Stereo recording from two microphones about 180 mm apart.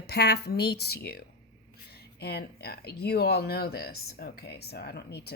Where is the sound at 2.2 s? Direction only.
65° left (ahead or behind).